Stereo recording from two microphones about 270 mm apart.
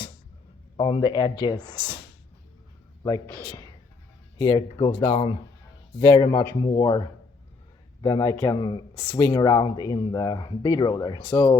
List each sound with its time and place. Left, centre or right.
0.8 s speech: centre
3.4 s speech: centre
8.0 s speech: centre